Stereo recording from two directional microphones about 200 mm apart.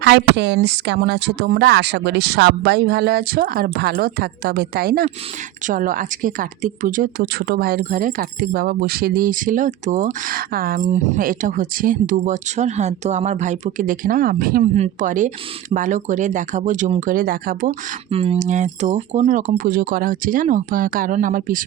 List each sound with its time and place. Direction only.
0.0 s a woman's voice: 60° right (ahead or behind)
18.1 s a woman's voice: 30° right (ahead or behind)